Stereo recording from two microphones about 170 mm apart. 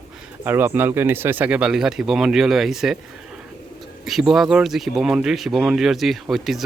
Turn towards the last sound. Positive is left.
turn(degrees=0)  # may be behind; listen again after turning